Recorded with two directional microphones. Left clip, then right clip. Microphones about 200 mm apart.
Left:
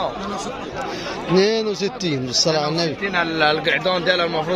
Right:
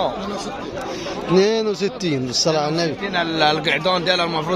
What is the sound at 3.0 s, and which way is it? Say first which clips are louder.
Speech: left 1 dB; 30° right (ahead or behind).